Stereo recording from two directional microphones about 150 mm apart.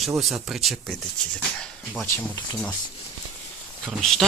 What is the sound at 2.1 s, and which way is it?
Speech, 15° left (ahead or behind).